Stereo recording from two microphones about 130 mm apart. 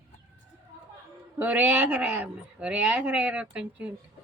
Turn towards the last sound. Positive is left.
turn(degrees=-10)  # may be behind; listen again after turning